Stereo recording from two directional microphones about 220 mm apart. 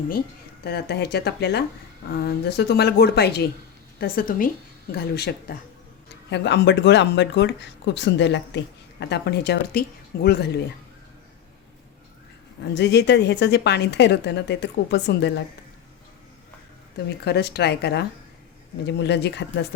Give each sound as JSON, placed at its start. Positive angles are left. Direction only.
{"t": 0.6, "sound": "a woman's voice", "side_deg": 45}
{"t": 12.6, "sound": "speech", "side_deg": 50}
{"t": 17.2, "sound": "speech", "side_deg": 45}